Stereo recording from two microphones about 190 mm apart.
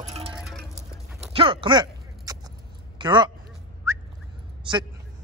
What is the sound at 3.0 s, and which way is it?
Speech, 25° right (ahead or behind).